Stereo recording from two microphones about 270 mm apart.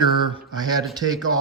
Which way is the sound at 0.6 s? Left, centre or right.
Centre.